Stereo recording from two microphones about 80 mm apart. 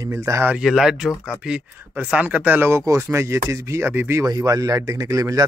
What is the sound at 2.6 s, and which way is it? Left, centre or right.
Speech, right.